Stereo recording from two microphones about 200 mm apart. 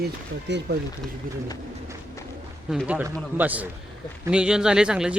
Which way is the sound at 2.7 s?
5° right (ahead or behind).